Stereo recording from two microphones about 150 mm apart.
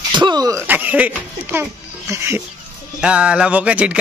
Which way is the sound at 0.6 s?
10° right (ahead or behind).